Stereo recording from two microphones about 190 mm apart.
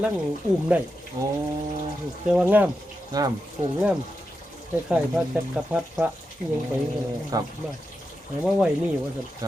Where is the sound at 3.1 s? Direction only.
20° right (ahead or behind).